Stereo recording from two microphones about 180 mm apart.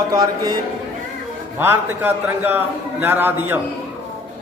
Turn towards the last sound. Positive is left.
turn(degrees=-10)  # may be behind; listen again after turning